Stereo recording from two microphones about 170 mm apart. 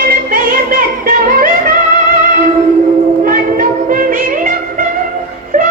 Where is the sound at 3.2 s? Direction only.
55° right (ahead or behind).